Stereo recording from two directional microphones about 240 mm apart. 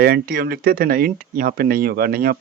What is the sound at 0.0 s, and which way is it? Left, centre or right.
Speech, right.